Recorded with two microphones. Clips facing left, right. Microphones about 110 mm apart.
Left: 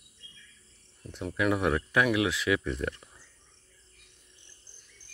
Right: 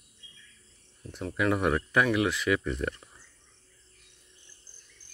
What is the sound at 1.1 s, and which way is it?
Speech, centre (ahead or behind).